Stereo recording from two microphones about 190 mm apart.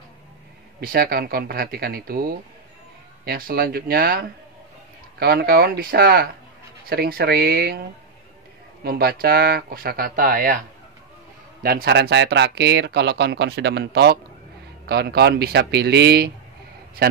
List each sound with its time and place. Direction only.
0.7 s speech: 50° right (ahead or behind)
8.8 s speech: 55° right (ahead or behind)
11.6 s speech: 55° right (ahead or behind)